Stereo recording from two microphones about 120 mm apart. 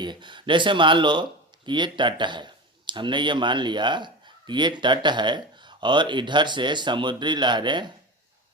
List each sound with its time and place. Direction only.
0.0 s speech: 40° right (ahead or behind)